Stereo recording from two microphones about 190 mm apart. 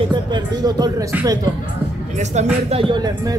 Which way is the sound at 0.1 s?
20° right (ahead or behind).